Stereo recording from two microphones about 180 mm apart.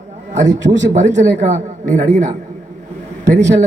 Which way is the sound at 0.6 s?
40° right (ahead or behind).